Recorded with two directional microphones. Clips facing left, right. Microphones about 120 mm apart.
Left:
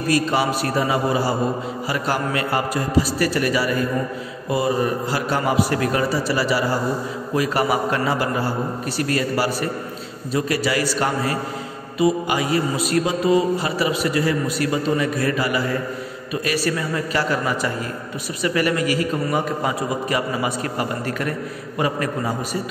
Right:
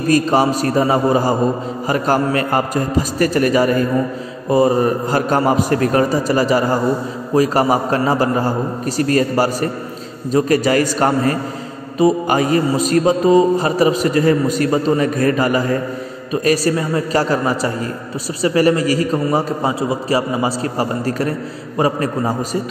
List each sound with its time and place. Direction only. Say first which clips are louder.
0.1 s a man's voice: right 6 dB; 40° right (ahead or behind)